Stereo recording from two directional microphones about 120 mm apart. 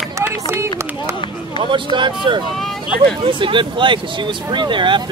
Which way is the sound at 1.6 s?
45° right (ahead or behind).